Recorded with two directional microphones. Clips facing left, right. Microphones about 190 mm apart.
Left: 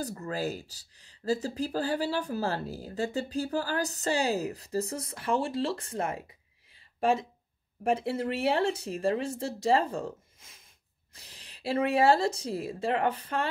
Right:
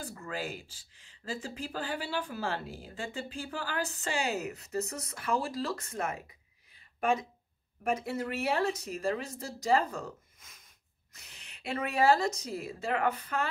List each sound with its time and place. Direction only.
0.0 s speech: 40° left (ahead or behind)